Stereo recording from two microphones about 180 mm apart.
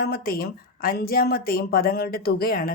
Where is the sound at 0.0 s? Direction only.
55° left (ahead or behind).